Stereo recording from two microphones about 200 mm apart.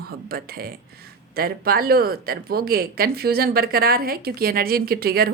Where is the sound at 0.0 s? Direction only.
50° right (ahead or behind).